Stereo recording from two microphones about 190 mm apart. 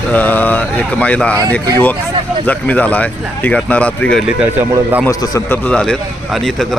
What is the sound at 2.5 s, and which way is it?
Speech, 10° left (ahead or behind).